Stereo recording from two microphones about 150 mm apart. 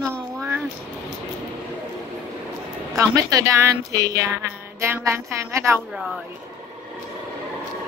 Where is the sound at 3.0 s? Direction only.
25° right (ahead or behind).